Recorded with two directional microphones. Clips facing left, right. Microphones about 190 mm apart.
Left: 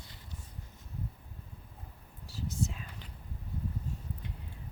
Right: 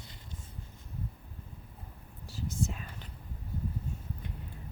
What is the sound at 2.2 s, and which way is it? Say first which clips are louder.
Whispering: right 1 dB; 50° right (ahead or behind).